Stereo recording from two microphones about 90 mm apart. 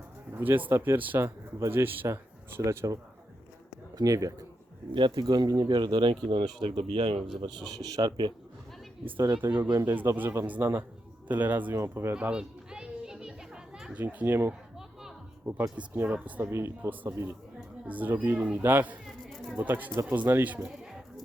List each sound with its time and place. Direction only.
0.3 s speech: 20° right (ahead or behind); by 4.4 s 40° right (ahead or behind)
4.9 s speech: 60° right (ahead or behind); by 7.3 s 85° right
7.4 s a man's voice: 55° right (ahead or behind)
9.4 s speech: 25° right (ahead or behind)
10.4 s speech: 15° right (ahead or behind)
12.1 s children playing: 10° right (ahead or behind)
13.9 s speech: 15° right (ahead or behind); by 15.6 s 35° right (ahead or behind)
16.0 s speech: 10° right (ahead or behind)
16.4 s speech: 30° right (ahead or behind)
19.0 s a sound: 5° left (ahead or behind)
19.5 s speech: 20° right (ahead or behind)